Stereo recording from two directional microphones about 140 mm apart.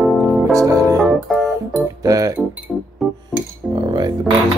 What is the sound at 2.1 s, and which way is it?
Music, 25° right (ahead or behind).